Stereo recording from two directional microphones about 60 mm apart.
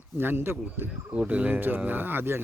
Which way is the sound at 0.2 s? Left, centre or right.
Right.